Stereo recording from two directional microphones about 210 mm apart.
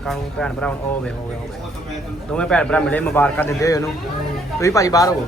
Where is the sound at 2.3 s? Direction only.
5° left (ahead or behind).